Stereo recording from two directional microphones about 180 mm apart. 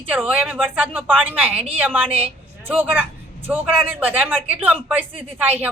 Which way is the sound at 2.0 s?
30° right (ahead or behind).